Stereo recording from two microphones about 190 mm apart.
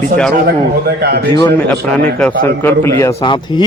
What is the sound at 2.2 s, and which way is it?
Speech, 10° left (ahead or behind).